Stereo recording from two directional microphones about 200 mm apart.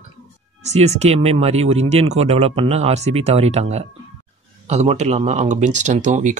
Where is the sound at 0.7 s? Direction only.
35° right (ahead or behind).